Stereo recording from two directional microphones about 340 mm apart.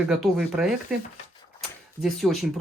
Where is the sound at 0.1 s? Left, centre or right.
Centre.